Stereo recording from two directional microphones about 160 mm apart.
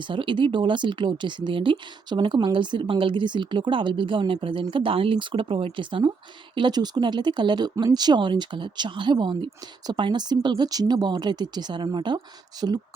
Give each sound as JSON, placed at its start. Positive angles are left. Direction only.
{"t": 0.1, "sound": "speech", "side_deg": -30}